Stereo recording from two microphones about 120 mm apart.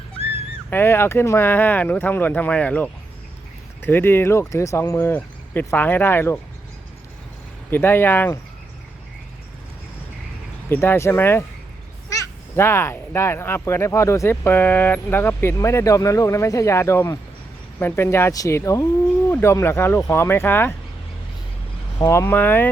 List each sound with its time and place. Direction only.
0.7 s speech: 20° left (ahead or behind)
7.7 s speech: 20° left (ahead or behind)
10.7 s speech: 20° left (ahead or behind)
21.9 s speech: 25° left (ahead or behind)